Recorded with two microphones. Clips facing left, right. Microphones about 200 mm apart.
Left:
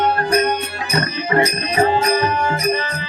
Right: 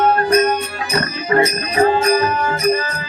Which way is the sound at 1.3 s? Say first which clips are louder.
Right 2 dB; 25° left (ahead or behind).